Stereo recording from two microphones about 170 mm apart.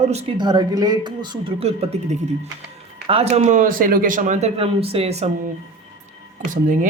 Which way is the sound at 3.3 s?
45° right (ahead or behind).